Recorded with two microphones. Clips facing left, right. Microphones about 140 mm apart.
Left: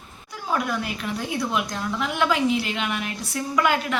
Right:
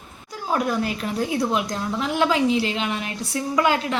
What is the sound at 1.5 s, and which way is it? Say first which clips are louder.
A woman's voice: right 2 dB; 35° right (ahead or behind).